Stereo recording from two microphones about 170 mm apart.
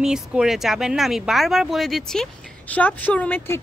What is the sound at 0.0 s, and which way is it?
A woman's voice, 5° right (ahead or behind).